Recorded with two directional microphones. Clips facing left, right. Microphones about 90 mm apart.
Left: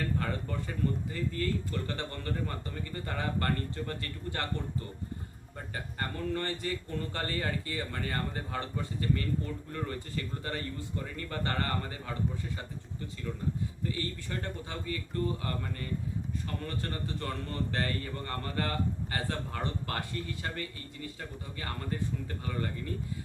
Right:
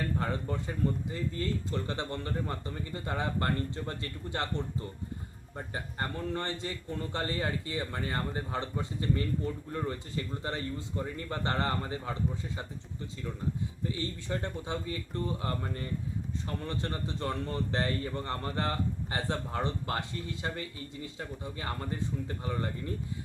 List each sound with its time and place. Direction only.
0.2 s a man's voice: 20° right (ahead or behind)
5.7 s a man's voice: 20° right (ahead or behind)
13.8 s a man's voice: 20° right (ahead or behind)